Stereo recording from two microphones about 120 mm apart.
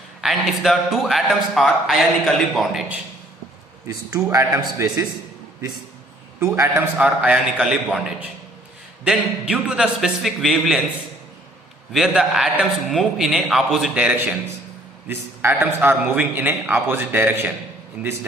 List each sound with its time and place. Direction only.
0.2 s a man's voice: centre (ahead or behind)
3.8 s a man's voice: 30° right (ahead or behind)
6.4 s a man's voice: 25° right (ahead or behind)
6.9 s a man's voice: 10° right (ahead or behind)
9.0 s a man's voice: 5° right (ahead or behind)
11.9 s a man's voice: centre (ahead or behind)